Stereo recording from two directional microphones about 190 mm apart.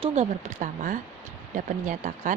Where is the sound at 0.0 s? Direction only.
35° right (ahead or behind).